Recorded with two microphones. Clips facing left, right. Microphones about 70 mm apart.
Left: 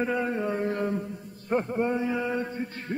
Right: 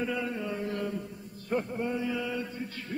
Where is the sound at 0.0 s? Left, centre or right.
Left.